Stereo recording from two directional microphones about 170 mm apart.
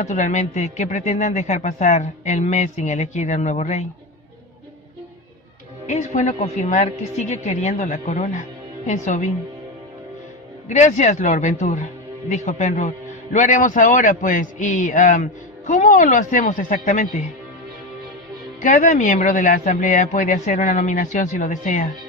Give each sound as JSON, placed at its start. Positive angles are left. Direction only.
{"t": 0.0, "sound": "speech", "side_deg": 45}
{"t": 5.9, "sound": "speech", "side_deg": 45}
{"t": 10.7, "sound": "speech", "side_deg": 45}
{"t": 18.6, "sound": "speech", "side_deg": 50}